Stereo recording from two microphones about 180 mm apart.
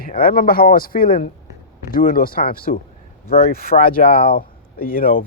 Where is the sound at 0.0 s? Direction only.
55° left (ahead or behind).